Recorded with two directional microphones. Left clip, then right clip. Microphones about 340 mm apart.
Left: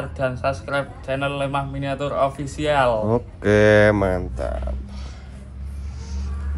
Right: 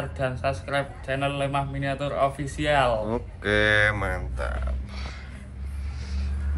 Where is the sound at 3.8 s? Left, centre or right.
Left.